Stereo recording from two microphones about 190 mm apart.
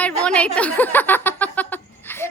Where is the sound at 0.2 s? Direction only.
5° left (ahead or behind).